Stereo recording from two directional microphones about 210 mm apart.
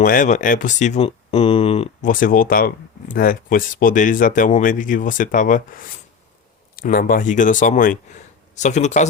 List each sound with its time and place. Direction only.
0.0 s speech: 40° left (ahead or behind)